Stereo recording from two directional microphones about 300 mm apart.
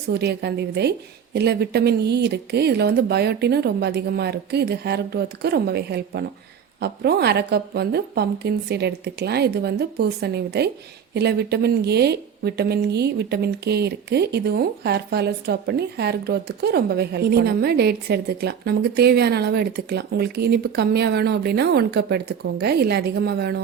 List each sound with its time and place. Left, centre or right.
0.1 s speech: right